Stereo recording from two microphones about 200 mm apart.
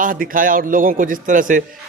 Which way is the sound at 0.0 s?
45° right (ahead or behind).